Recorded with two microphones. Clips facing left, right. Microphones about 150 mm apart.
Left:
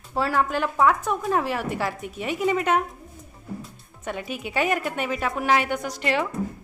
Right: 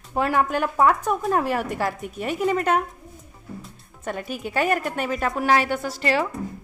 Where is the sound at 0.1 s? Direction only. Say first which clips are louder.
Right 2 dB; 15° right (ahead or behind).